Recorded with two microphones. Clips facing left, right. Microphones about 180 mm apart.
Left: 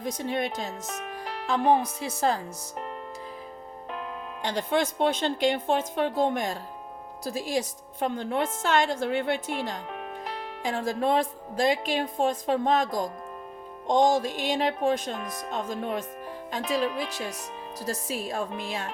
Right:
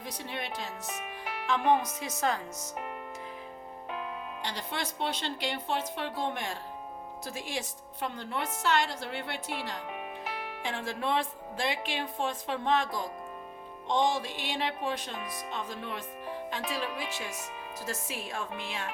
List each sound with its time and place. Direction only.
0.0 s a woman's voice: 45° left (ahead or behind)
1.2 s music: 5° right (ahead or behind)
1.5 s a woman's voice: 35° left (ahead or behind)
4.4 s a woman's voice: 50° left (ahead or behind)